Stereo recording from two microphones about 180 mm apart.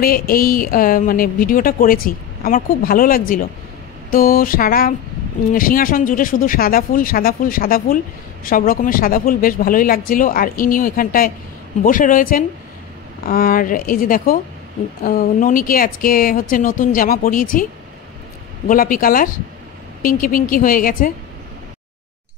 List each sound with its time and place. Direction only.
0.0 s a woman's voice: 55° left (ahead or behind)
18.7 s a woman's voice: 50° left (ahead or behind)